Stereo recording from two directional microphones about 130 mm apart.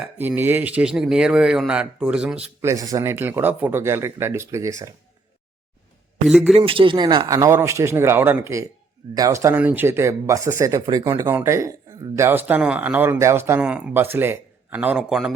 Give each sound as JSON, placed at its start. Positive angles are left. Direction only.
{"t": 0.2, "sound": "speech", "side_deg": -15}
{"t": 2.6, "sound": "speech", "side_deg": -25}
{"t": 6.2, "sound": "a man's voice", "side_deg": 0}
{"t": 6.5, "sound": "speech", "side_deg": -45}
{"t": 13.6, "sound": "speech", "side_deg": -10}